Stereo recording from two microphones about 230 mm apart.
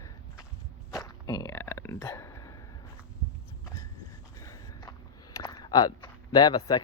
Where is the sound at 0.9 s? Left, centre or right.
Centre.